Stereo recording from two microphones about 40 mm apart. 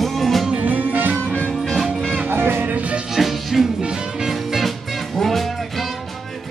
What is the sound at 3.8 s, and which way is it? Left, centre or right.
Music, centre.